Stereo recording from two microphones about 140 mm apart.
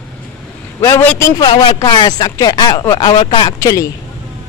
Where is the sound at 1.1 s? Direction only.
20° left (ahead or behind); by 3.5 s 40° left (ahead or behind).